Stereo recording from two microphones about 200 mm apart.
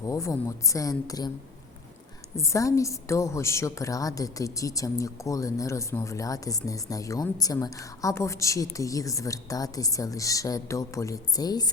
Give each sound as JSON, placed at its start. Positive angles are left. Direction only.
{"t": 0.0, "sound": "a woman's voice", "side_deg": 15}
{"t": 2.3, "sound": "a woman's voice", "side_deg": 15}